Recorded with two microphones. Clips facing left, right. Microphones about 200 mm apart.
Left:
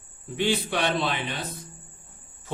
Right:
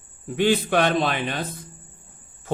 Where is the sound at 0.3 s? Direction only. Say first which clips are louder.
Right 6 dB; 50° right (ahead or behind).